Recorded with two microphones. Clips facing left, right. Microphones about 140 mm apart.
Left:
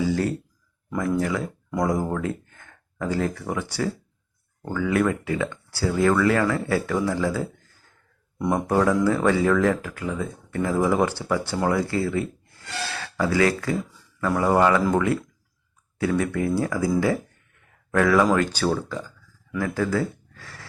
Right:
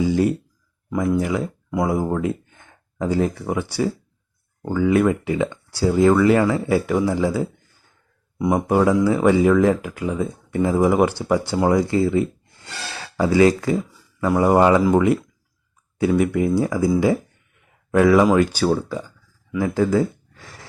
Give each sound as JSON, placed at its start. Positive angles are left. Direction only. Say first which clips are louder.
{"t": 0.0, "sound": "speech", "louder": "right 5 dB", "side_deg": -15}
{"t": 17.0, "sound": "a sound", "louder": "right 4 dB", "side_deg": -20}
{"t": 18.3, "sound": "speech", "louder": "right 4 dB", "side_deg": -10}